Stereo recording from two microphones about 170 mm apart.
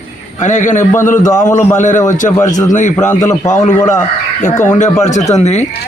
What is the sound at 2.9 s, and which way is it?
A man's voice, 15° left (ahead or behind).